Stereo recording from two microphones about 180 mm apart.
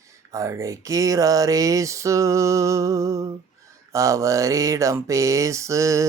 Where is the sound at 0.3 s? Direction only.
15° right (ahead or behind).